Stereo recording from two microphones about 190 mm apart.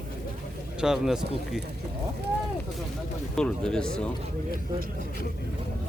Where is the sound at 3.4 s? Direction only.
5° left (ahead or behind).